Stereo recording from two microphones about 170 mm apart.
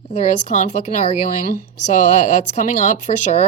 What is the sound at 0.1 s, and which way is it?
Speech, 40° left (ahead or behind).